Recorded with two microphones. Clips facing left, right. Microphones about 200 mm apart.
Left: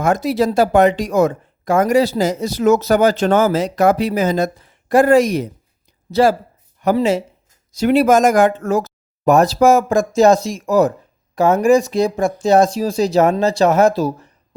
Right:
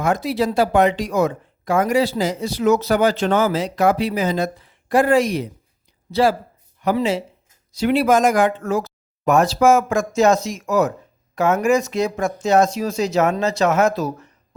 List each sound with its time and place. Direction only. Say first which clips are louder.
0.0 s a woman's voice: left 4 dB; 45° left (ahead or behind)